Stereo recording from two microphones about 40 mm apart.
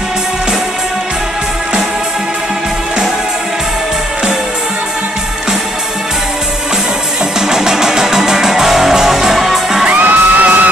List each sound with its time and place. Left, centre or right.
7.3 s music: centre
9.8 s music: right